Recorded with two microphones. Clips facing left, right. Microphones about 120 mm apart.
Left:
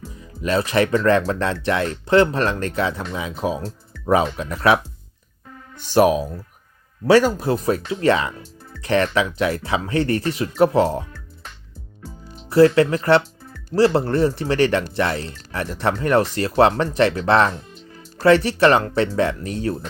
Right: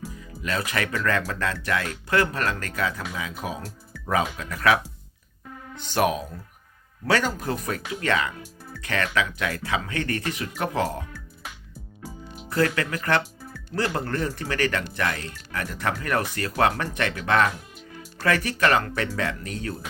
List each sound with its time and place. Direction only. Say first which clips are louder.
0.4 s speech: left 9 dB; 30° left (ahead or behind)
5.9 s speech: left 8 dB; 25° left (ahead or behind)
12.5 s speech: left 11 dB; 25° left (ahead or behind)